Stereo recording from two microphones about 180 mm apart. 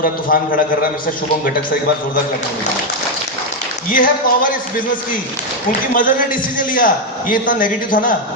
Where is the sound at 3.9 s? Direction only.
50° left (ahead or behind).